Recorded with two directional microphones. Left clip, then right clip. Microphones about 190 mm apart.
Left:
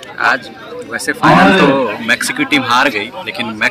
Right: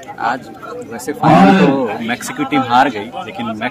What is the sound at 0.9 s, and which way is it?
A man's voice, 15° right (ahead or behind).